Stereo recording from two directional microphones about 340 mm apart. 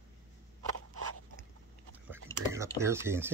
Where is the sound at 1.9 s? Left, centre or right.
Centre.